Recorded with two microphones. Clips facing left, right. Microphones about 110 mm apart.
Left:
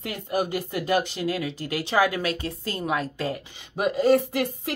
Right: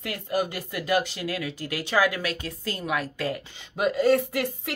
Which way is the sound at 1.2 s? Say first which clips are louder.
Left 3 dB; 25° left (ahead or behind).